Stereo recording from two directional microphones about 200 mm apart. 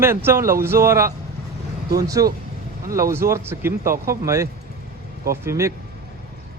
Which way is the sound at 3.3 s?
10° right (ahead or behind).